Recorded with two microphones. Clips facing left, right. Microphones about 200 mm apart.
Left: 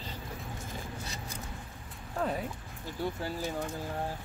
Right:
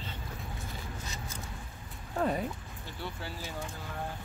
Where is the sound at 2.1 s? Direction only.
Centre (ahead or behind).